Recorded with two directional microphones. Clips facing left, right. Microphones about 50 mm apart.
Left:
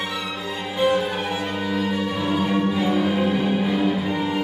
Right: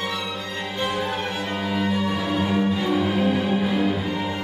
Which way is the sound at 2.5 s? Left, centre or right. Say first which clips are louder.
Left 1 dB; centre.